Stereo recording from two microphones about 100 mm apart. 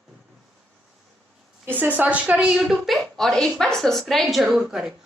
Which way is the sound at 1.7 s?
15° right (ahead or behind).